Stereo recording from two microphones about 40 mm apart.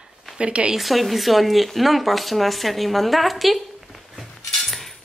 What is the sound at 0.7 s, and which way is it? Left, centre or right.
Speech, centre.